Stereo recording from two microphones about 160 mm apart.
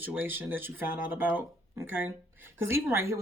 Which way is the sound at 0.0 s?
10° right (ahead or behind).